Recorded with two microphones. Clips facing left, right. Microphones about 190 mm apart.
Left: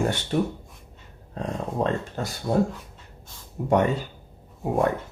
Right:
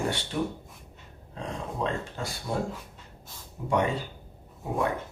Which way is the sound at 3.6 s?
50° left (ahead or behind).